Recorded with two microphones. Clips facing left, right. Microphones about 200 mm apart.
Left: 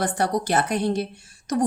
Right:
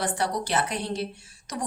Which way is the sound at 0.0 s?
45° left (ahead or behind).